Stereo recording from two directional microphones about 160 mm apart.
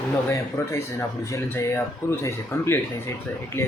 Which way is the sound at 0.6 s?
15° left (ahead or behind).